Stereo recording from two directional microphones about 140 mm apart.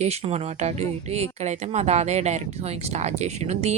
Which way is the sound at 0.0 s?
50° right (ahead or behind).